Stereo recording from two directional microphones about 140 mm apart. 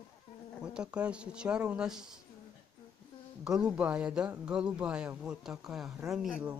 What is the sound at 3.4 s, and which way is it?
Speech, 5° right (ahead or behind).